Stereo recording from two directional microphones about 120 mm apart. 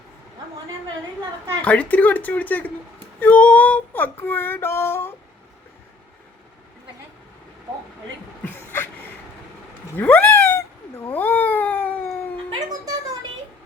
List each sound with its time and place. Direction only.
1.6 s female singing: 10° left (ahead or behind)
8.4 s a sound: 20° left (ahead or behind)
9.9 s cat: 15° left (ahead or behind)